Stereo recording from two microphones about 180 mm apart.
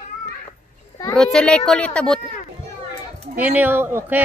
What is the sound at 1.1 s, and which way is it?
Speech, 5° left (ahead or behind).